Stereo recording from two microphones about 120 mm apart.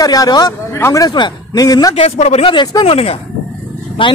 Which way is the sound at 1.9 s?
60° left (ahead or behind).